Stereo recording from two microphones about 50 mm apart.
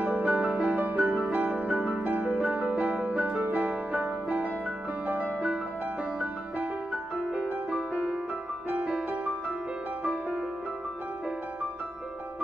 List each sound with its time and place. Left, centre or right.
0.0 s music: right
8.6 s music: right